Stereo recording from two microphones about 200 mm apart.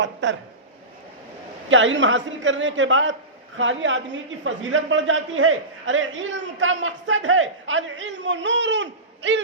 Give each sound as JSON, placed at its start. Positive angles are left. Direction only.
{"t": 0.0, "sound": "speech", "side_deg": -65}
{"t": 1.7, "sound": "a woman's voice", "side_deg": -70}